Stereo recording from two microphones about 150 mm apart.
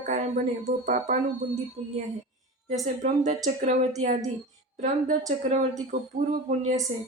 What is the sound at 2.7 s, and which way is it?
Speech, 50° right (ahead or behind).